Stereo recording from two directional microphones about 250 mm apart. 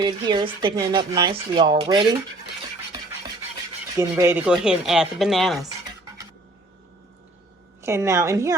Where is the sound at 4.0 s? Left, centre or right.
Centre.